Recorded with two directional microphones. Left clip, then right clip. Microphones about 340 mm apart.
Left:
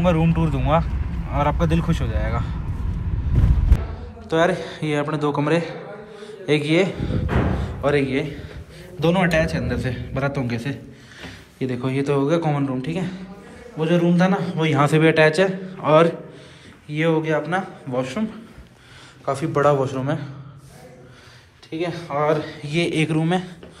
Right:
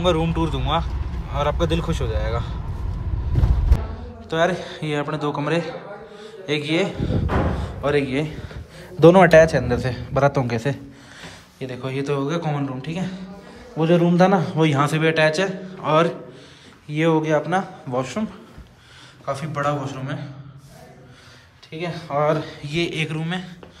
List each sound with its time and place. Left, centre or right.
0.0 s a man's voice: centre
4.3 s a man's voice: centre
7.5 s a sound: centre
9.0 s a man's voice: right
13.7 s a man's voice: right
19.2 s a man's voice: centre
21.6 s a man's voice: centre